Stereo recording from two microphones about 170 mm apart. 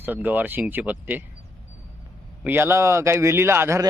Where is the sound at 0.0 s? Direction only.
10° right (ahead or behind).